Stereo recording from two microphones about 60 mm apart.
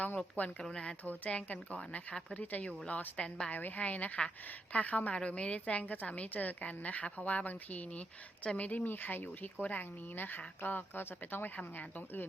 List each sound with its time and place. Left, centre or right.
0.6 s a woman's voice: centre
3.5 s a woman's voice: left